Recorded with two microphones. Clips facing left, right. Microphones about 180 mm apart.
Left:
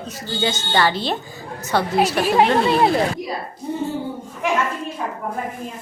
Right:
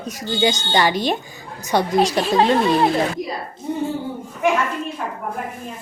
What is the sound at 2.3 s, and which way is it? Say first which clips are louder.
Speech: even; 15° left (ahead or behind).